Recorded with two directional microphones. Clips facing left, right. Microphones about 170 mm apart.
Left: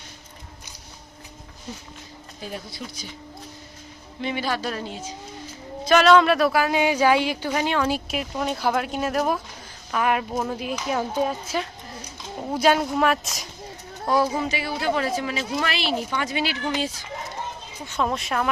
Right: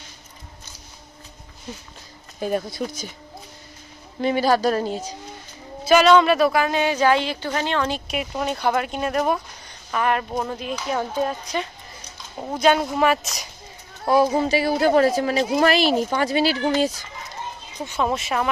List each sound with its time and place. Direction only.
2.4 s speech: 50° right (ahead or behind)
4.2 s speech: 40° right (ahead or behind)
5.8 s speech: 5° right (ahead or behind)
14.3 s speech: 35° right (ahead or behind)
17.9 s speech: 5° right (ahead or behind)